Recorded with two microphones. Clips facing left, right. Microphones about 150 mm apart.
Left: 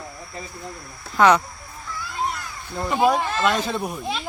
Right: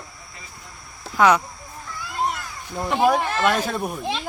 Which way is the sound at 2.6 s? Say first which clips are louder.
Even; 10° right (ahead or behind).